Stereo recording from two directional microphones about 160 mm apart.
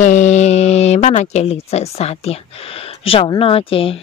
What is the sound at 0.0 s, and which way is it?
Speech, 50° left (ahead or behind).